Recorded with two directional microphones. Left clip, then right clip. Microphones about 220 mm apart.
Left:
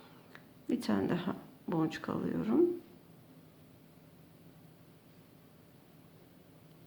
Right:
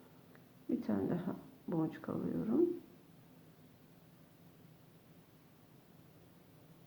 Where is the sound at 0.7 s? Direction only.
15° left (ahead or behind).